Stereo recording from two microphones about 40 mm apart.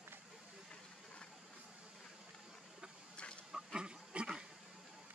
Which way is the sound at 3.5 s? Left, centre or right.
Right.